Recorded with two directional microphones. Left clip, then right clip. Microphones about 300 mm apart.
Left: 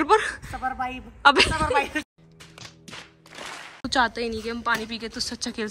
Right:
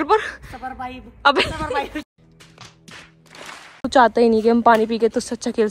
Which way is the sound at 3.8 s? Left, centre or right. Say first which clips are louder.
Right 9 dB; centre.